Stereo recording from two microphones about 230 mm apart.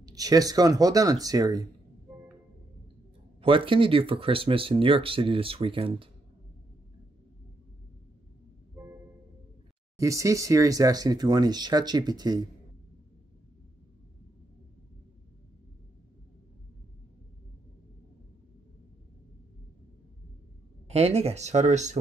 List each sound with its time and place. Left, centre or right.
0.0 s speech: centre
3.3 s speech: right
9.9 s speech: centre
20.9 s speech: right